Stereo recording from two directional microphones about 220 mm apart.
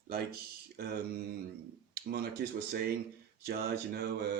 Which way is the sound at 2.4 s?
50° right (ahead or behind).